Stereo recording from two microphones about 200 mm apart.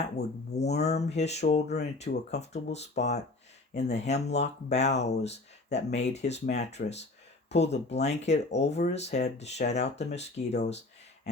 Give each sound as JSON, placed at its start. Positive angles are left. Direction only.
{"t": 0.0, "sound": "speech", "side_deg": 35}